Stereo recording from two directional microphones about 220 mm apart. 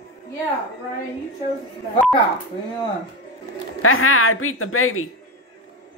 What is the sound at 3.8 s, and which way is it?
A woman's voice, 70° left (ahead or behind).